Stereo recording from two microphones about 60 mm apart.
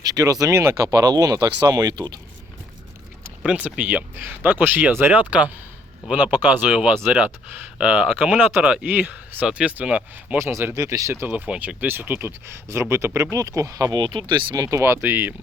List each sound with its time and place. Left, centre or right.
0.0 s speech: right
0.5 s speech: right
3.4 s speech: right
4.1 s speech: right
9.5 s speech: centre
10.3 s speech: right
10.8 s speech: right
11.3 s speech: right
13.3 s speech: right